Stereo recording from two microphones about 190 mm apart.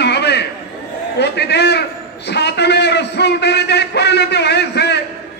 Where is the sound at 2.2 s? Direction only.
60° left (ahead or behind).